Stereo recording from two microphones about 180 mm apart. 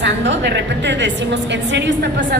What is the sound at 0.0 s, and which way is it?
A woman's voice, 75° right (ahead or behind).